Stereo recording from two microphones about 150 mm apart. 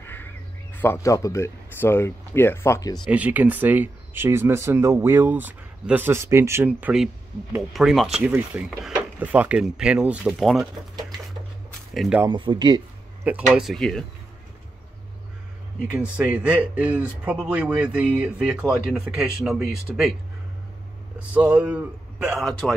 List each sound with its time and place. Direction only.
0.0 s crow: 15° left (ahead or behind)
0.7 s speech: 20° left (ahead or behind)
3.1 s speech: 10° right (ahead or behind)
11.9 s speech: centre (ahead or behind)
12.3 s speech: 35° right (ahead or behind)
13.5 s speech: centre (ahead or behind)
16.2 s speech: 5° right (ahead or behind)
21.3 s speech: 10° right (ahead or behind)